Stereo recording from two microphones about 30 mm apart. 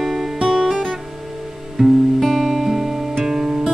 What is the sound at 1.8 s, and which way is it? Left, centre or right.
Music, centre.